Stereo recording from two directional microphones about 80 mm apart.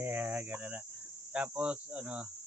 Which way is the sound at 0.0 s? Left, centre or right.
Right.